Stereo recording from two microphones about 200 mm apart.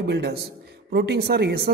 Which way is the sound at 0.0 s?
55° right (ahead or behind).